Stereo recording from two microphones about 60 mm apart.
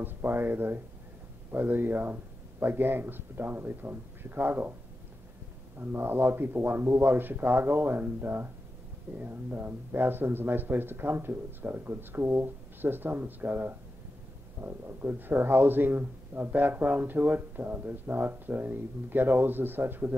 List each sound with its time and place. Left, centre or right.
0.0 s speech: right
5.8 s speech: right